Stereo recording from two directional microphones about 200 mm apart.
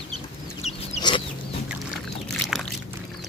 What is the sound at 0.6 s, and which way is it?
Chicken, 30° left (ahead or behind).